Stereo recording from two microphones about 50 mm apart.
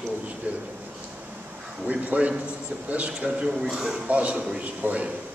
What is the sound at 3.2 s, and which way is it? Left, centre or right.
Speech, centre.